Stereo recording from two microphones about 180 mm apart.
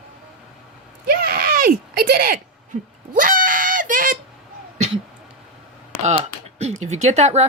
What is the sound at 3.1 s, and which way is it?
Screaming, 50° right (ahead or behind).